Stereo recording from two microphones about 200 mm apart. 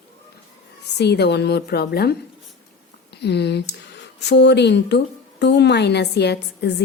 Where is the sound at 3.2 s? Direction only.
55° left (ahead or behind).